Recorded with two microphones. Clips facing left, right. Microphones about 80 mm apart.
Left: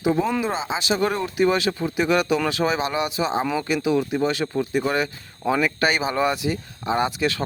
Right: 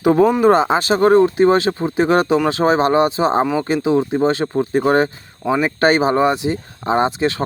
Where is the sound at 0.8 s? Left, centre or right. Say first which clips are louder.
Right 10 dB; right.